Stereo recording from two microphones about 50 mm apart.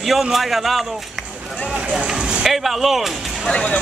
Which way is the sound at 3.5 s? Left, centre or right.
Left.